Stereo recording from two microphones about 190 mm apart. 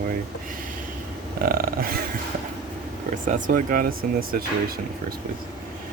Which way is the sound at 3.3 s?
45° right (ahead or behind).